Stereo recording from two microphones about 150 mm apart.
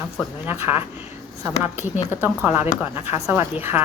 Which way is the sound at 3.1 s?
15° right (ahead or behind).